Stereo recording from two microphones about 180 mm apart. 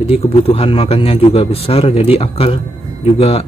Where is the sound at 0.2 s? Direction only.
35° left (ahead or behind).